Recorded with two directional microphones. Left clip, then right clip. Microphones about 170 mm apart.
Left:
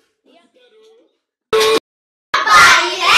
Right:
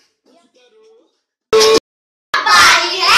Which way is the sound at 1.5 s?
65° right (ahead or behind).